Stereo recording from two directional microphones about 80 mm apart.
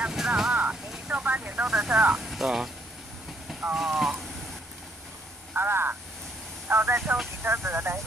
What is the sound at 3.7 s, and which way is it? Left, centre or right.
Speech, centre.